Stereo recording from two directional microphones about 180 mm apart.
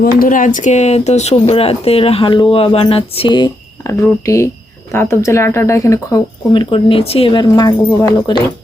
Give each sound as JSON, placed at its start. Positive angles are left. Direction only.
{"t": 0.0, "sound": "speech", "side_deg": 50}